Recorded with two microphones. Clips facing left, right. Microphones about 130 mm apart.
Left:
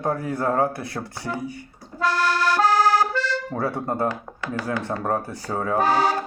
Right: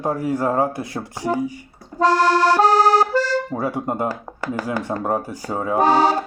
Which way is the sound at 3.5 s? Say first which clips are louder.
Right 2 dB; 15° right (ahead or behind).